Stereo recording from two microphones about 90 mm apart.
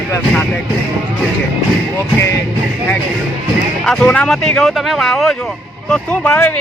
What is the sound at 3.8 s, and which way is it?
Speech, 10° left (ahead or behind).